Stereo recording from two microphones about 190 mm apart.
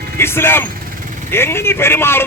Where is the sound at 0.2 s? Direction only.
10° left (ahead or behind).